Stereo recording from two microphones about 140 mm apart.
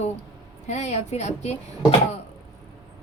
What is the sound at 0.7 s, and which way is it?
Speech, 55° left (ahead or behind).